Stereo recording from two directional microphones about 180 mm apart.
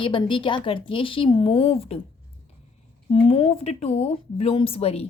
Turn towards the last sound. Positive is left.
turn(degrees=35)  # may be behind; listen again after turning